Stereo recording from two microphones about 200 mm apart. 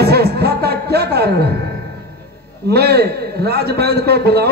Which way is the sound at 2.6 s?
55° right (ahead or behind).